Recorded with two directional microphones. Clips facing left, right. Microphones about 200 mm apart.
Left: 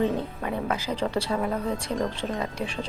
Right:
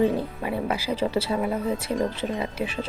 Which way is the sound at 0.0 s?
10° right (ahead or behind).